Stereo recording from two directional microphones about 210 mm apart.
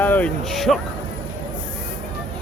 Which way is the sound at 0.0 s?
10° left (ahead or behind).